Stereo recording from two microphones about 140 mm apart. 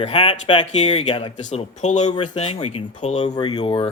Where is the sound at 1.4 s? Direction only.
60° left (ahead or behind).